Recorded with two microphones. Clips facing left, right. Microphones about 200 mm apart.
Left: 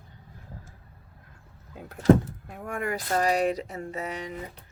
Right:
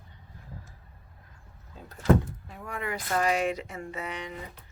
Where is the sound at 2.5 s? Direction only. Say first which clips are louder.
Left 7 dB; 50° left (ahead or behind).